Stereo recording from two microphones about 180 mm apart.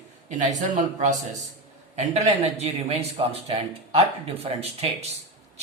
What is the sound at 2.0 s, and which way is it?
A man's voice, 35° right (ahead or behind).